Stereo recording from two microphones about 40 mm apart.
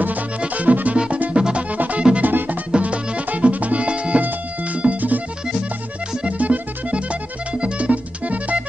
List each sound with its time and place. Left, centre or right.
0.4 s music: right
0.9 s music: right
1.7 s music: right
2.8 s music: right
6.2 s music: right